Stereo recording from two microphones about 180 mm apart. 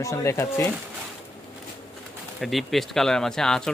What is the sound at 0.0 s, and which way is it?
Speech, 15° left (ahead or behind).